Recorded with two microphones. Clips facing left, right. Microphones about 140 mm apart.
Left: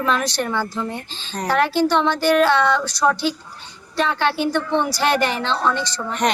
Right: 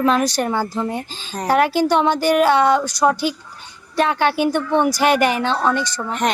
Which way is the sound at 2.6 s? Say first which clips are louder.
Right 3 dB; 45° right (ahead or behind).